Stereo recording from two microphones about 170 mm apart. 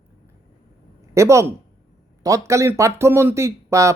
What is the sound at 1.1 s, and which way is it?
Speech, 15° right (ahead or behind).